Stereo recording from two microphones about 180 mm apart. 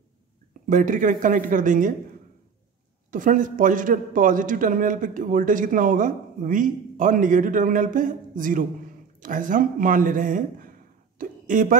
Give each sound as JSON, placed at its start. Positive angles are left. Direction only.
{"t": 0.7, "sound": "a man's voice", "side_deg": -45}
{"t": 3.1, "sound": "a man's voice", "side_deg": -45}